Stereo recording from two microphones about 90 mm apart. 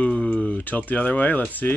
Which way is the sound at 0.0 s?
15° left (ahead or behind).